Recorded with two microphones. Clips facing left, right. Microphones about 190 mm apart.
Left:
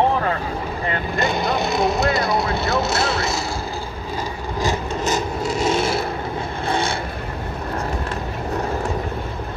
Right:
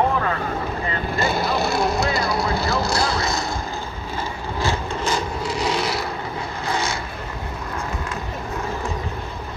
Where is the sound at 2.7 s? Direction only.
25° left (ahead or behind).